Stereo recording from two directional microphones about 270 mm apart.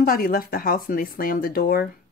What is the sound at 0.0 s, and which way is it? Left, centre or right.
Speech, left.